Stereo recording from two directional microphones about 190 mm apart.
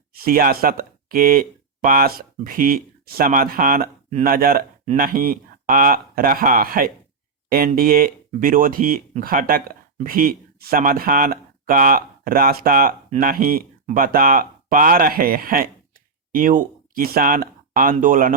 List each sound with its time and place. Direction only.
0.2 s speech: 50° right (ahead or behind)